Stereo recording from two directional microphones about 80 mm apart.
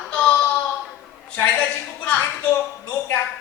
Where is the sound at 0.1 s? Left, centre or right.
Centre.